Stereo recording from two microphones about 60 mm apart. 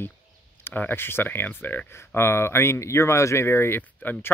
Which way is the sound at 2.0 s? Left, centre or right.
Left.